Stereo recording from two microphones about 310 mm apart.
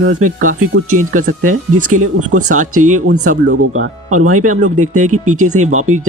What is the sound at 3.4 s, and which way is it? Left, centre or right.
Speech, right.